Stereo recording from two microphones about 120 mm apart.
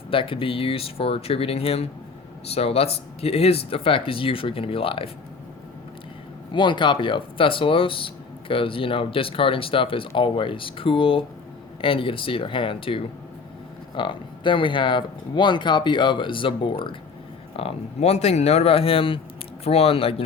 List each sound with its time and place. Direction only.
0.1 s speech: 45° left (ahead or behind)
6.5 s speech: 40° left (ahead or behind)
17.6 s speech: 55° left (ahead or behind)